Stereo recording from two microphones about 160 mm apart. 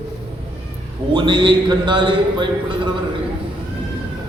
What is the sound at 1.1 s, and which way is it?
A man's voice, 30° right (ahead or behind).